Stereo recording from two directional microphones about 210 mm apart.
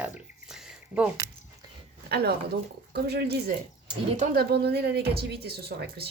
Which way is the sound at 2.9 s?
50° right (ahead or behind).